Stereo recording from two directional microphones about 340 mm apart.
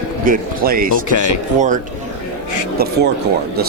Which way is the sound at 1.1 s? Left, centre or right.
Left.